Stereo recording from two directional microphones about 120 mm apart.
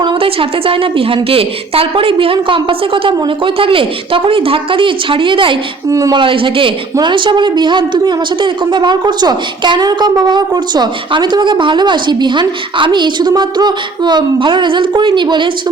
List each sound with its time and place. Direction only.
0.0 s a woman's voice: 45° right (ahead or behind)
5.9 s speech: 30° right (ahead or behind)
6.1 s a woman's voice: 45° right (ahead or behind)